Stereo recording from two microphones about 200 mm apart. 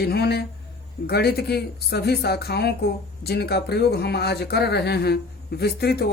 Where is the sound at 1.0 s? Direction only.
50° left (ahead or behind).